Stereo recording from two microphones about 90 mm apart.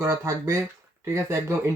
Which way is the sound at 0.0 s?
35° right (ahead or behind).